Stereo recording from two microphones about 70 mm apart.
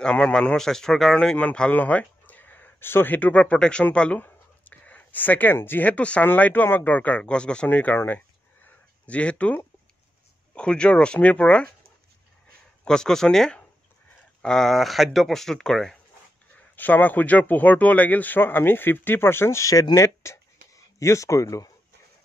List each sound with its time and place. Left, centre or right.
0.0 s speech: centre; by 8.2 s left
8.6 s a sound: centre
10.5 s speech: centre
12.8 s speech: centre
16.7 s speech: left